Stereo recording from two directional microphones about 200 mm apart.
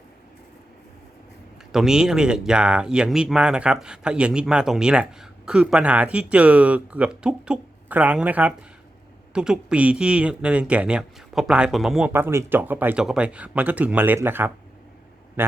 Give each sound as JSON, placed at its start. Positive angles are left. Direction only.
{"t": 1.7, "sound": "speech", "side_deg": 0}